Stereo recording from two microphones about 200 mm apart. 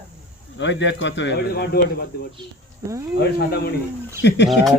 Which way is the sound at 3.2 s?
55° left (ahead or behind).